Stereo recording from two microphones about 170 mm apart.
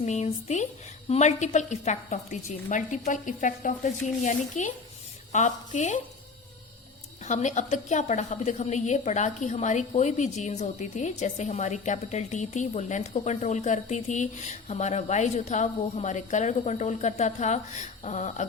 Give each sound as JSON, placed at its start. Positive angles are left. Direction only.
{"t": 0.0, "sound": "a woman's voice", "side_deg": 40}
{"t": 7.3, "sound": "a woman's voice", "side_deg": 45}